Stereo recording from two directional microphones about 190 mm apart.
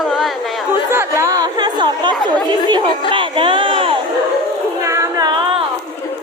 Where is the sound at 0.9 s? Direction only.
15° right (ahead or behind).